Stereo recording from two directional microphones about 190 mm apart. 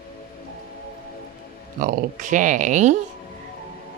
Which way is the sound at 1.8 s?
45° right (ahead or behind).